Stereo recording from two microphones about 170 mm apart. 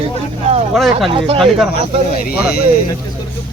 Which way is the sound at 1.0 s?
30° right (ahead or behind).